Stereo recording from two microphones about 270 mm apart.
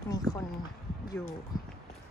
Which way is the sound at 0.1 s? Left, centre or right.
Centre.